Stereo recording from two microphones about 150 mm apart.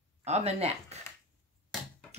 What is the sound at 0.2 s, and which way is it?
Speech, 45° right (ahead or behind).